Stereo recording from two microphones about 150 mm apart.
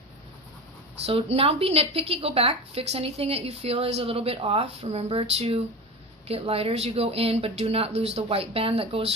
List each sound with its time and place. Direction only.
1.0 s a woman's voice: 40° right (ahead or behind)